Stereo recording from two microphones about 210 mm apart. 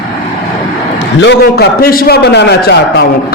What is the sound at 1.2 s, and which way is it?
A man's voice, 50° left (ahead or behind).